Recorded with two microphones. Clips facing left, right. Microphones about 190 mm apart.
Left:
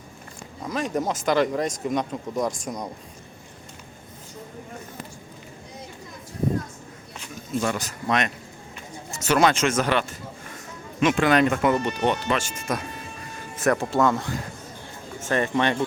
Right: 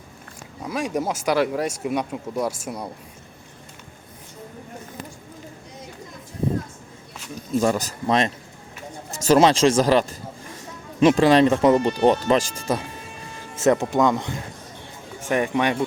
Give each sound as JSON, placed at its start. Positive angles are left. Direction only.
{"t": 0.6, "sound": "speech", "side_deg": -10}
{"t": 7.6, "sound": "speech", "side_deg": -35}
{"t": 13.6, "sound": "speech", "side_deg": -20}